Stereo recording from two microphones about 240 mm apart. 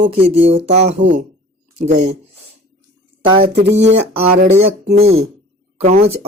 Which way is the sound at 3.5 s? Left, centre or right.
Right.